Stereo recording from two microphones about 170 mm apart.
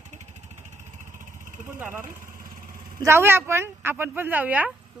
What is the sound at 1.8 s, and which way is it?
Speech, 15° right (ahead or behind).